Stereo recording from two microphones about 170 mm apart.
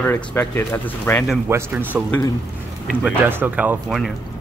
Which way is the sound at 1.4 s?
10° right (ahead or behind).